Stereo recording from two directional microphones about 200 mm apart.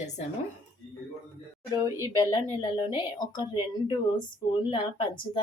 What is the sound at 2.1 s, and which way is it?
A woman's voice, 20° left (ahead or behind).